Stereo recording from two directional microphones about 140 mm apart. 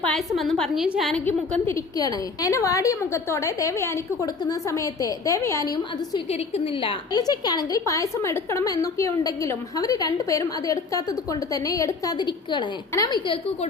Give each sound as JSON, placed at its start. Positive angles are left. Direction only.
{"t": 0.0, "sound": "a woman's voice", "side_deg": 5}
{"t": 1.2, "sound": "a woman's voice", "side_deg": 15}